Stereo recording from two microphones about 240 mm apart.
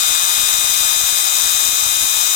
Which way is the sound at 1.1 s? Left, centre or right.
Left.